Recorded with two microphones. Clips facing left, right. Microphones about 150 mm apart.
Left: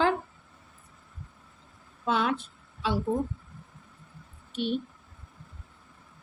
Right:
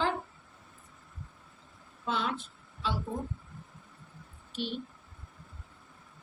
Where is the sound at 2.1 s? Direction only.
60° left (ahead or behind).